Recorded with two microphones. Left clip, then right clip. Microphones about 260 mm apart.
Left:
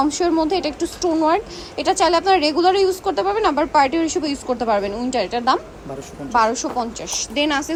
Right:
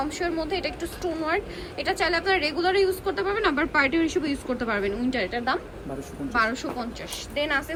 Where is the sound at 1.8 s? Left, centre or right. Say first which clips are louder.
Left 8 dB; centre.